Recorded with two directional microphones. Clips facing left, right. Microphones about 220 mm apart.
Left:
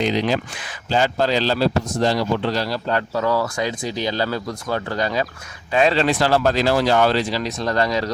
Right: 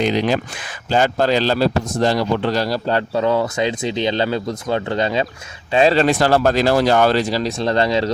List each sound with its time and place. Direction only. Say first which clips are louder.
0.0 s speech: right 2 dB; 55° right (ahead or behind); by 6.0 s 30° right (ahead or behind)
6.0 s speech: right 3 dB; 45° right (ahead or behind)
7.6 s speech: right 3 dB; 25° right (ahead or behind)